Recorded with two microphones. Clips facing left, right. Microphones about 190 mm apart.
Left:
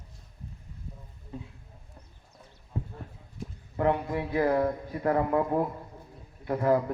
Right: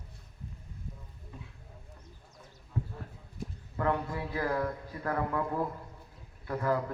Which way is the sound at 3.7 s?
20° left (ahead or behind).